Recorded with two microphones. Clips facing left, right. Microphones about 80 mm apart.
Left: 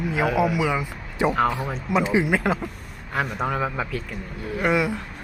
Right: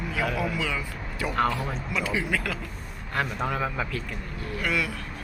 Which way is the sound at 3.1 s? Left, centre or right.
Centre.